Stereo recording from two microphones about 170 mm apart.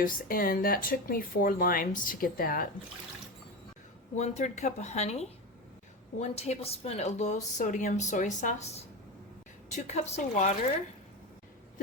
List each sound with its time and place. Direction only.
0.0 s speech: 60° left (ahead or behind)
4.1 s a woman's voice: 45° left (ahead or behind)